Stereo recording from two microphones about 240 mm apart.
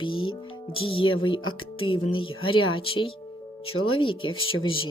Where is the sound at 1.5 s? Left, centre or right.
Left.